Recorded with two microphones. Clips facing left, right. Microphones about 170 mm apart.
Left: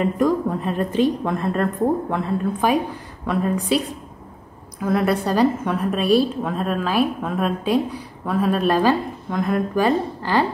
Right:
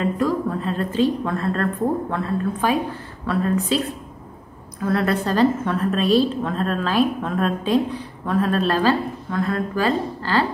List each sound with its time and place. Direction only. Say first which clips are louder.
0.0 s a woman's voice: left 2 dB; 15° left (ahead or behind)
4.8 s a woman's voice: left 1 dB; 10° left (ahead or behind)